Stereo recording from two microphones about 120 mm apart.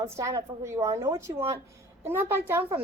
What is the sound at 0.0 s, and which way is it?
A woman's voice, 30° right (ahead or behind).